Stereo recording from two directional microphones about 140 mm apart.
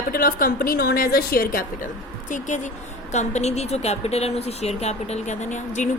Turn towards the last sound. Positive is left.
turn(degrees=60)  # may be behind; listen again after turning